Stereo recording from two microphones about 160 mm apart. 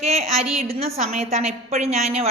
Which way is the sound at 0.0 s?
40° right (ahead or behind).